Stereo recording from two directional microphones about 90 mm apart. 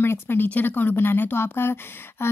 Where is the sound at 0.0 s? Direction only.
25° left (ahead or behind).